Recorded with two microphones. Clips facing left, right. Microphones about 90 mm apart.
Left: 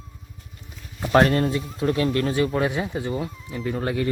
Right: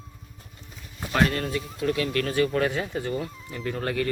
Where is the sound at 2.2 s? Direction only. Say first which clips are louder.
Left 2 dB; 15° left (ahead or behind).